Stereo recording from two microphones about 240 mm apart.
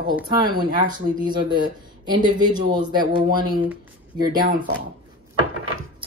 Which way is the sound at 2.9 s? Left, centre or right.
Centre.